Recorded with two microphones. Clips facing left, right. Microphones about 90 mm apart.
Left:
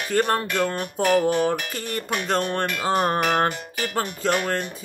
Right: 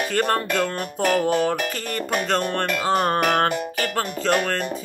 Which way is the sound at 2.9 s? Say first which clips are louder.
Even; 10° left (ahead or behind).